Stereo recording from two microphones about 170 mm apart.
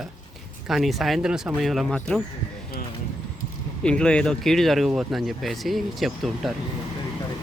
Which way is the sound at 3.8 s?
5° left (ahead or behind).